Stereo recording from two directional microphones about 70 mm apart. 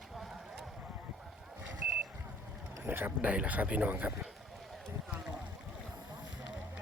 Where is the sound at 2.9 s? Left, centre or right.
Right.